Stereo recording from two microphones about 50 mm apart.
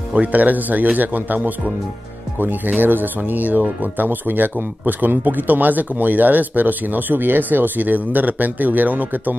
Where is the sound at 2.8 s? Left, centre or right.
Right.